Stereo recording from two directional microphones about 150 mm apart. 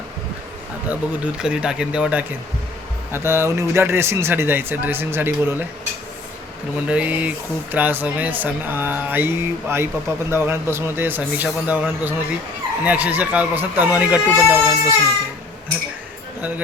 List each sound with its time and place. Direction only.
0.9 s speech: 5° right (ahead or behind)
6.8 s speech: 10° right (ahead or behind)